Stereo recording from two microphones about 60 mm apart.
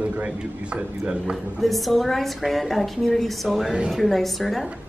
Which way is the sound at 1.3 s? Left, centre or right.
Centre.